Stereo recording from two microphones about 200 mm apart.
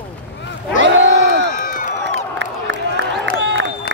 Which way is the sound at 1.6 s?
40° left (ahead or behind).